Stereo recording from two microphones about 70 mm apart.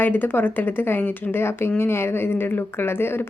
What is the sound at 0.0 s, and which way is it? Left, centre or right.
Speech, left.